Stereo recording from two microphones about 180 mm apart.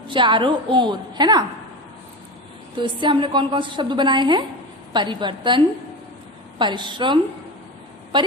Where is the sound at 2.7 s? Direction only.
25° right (ahead or behind).